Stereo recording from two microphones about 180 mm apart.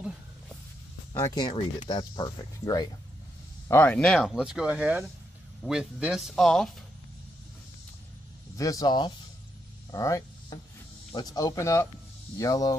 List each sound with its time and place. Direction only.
1.1 s speech: 20° left (ahead or behind)
3.6 s speech: 10° left (ahead or behind)
8.5 s speech: 20° left (ahead or behind)
9.8 s vehicle: 20° left (ahead or behind)
11.1 s speech: 20° left (ahead or behind)